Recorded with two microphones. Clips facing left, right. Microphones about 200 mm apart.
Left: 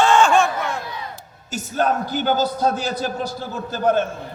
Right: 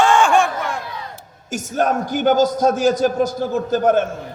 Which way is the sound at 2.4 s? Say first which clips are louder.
Right 5 dB; 40° right (ahead or behind).